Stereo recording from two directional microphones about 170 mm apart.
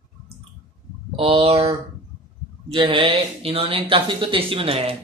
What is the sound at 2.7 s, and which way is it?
Speech, 30° right (ahead or behind).